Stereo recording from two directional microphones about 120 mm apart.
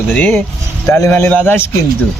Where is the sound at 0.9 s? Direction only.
25° left (ahead or behind).